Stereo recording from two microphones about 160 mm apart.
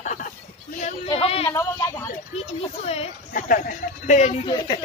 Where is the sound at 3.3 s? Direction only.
60° left (ahead or behind).